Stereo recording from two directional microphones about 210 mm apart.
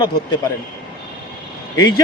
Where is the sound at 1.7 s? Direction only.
20° left (ahead or behind).